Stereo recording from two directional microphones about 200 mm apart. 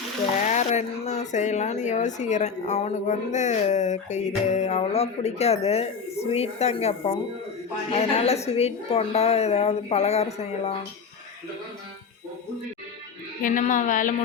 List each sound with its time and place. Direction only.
0.3 s speech: 35° left (ahead or behind)
13.4 s speech: 40° left (ahead or behind)